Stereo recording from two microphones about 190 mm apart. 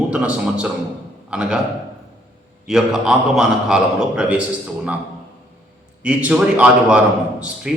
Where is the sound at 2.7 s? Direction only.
5° right (ahead or behind).